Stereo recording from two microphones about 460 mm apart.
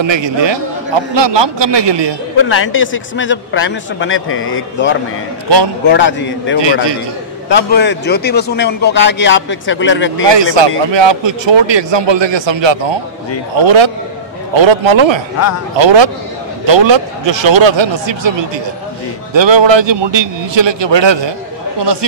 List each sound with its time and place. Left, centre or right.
0.0 s a man's voice: right
2.4 s a man's voice: left
10.3 s speech: right
13.6 s a man's voice: right
19.3 s speech: right